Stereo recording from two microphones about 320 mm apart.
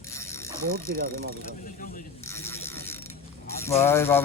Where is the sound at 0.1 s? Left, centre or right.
Centre.